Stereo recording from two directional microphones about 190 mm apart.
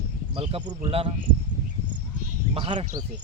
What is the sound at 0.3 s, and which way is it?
Speech, 30° right (ahead or behind).